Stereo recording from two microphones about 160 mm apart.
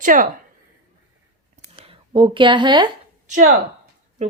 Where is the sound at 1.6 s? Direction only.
35° right (ahead or behind).